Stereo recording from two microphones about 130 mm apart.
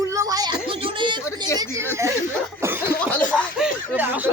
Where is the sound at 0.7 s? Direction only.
40° right (ahead or behind).